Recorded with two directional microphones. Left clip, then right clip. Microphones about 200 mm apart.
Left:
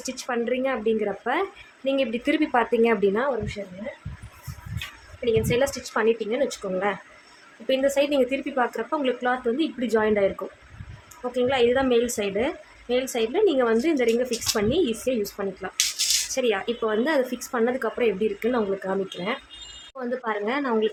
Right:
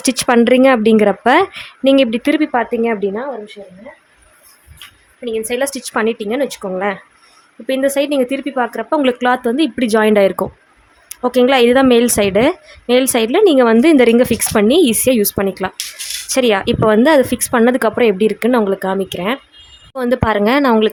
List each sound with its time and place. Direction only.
0.0 s speech: 50° right (ahead or behind); by 3.5 s 20° right (ahead or behind)
5.2 s a woman's voice: 40° right (ahead or behind); by 20.9 s 60° right (ahead or behind)